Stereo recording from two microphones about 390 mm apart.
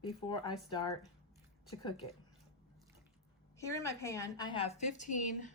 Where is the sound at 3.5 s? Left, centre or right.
Centre.